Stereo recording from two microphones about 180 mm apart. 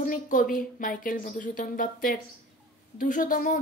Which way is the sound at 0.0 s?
45° left (ahead or behind).